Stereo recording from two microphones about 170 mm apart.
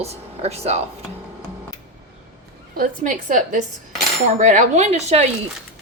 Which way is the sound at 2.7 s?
50° right (ahead or behind).